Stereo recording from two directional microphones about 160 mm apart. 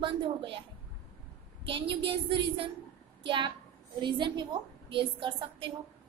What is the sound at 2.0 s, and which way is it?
A woman's voice, 35° right (ahead or behind).